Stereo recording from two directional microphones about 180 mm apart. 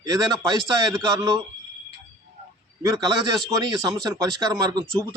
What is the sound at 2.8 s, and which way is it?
Speech, 20° right (ahead or behind).